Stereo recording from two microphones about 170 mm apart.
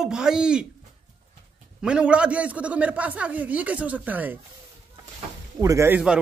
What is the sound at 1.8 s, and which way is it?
Speech, 5° right (ahead or behind).